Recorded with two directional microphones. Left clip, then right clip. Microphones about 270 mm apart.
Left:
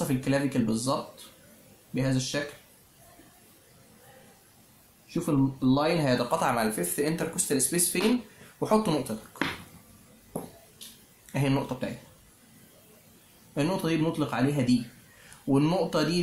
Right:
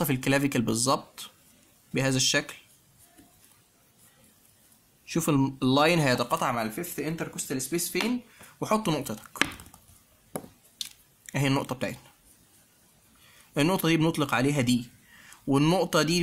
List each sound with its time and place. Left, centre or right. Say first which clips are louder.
0.0 s speech: right 2 dB; right
2.0 s speech: right 5 dB; right
5.0 s speech: right 1 dB; right
11.3 s speech: right 1 dB; right
13.6 s speech: right 3 dB; right